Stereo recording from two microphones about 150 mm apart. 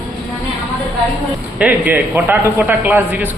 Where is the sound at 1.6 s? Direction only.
10° right (ahead or behind).